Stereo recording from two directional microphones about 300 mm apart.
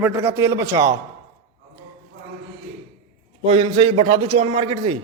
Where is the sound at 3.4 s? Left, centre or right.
Centre.